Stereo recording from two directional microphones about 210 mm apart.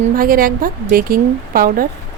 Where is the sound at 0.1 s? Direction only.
40° right (ahead or behind).